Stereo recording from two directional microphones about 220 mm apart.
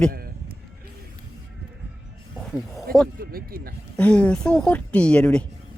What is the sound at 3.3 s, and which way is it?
Speech, 40° right (ahead or behind).